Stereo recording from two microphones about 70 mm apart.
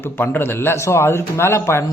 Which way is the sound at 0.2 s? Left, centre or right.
Left.